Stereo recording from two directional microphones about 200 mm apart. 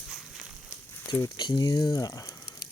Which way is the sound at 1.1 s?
20° left (ahead or behind).